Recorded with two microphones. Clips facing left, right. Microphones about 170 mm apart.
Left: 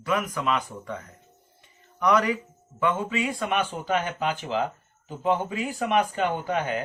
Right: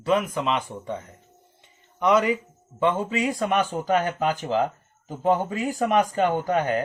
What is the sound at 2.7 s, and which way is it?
Speech, 30° right (ahead or behind).